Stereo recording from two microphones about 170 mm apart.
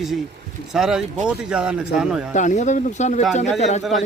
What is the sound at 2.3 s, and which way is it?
Speech, 45° left (ahead or behind).